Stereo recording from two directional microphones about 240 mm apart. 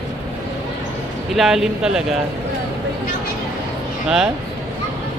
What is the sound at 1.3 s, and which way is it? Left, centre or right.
Speech, centre.